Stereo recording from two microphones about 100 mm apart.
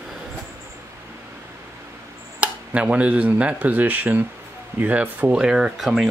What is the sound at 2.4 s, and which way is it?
Speech, 10° right (ahead or behind).